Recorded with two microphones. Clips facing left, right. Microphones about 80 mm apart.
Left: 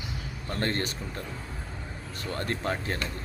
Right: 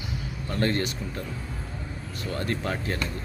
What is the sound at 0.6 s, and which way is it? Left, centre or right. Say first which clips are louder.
Speech: right 4 dB; left.